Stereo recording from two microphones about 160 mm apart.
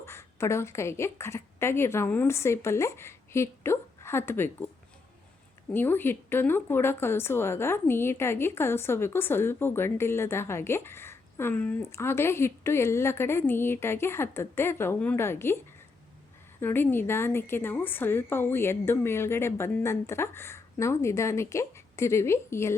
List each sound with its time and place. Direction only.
0.0 s a woman's voice: 15° left (ahead or behind)
5.7 s speech: 15° left (ahead or behind)
16.6 s speech: 15° left (ahead or behind)